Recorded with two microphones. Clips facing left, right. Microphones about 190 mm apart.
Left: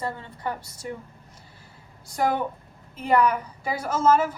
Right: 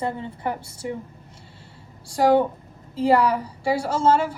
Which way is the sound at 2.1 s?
30° right (ahead or behind).